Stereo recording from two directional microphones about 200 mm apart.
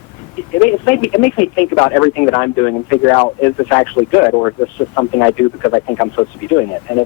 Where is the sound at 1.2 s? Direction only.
10° left (ahead or behind).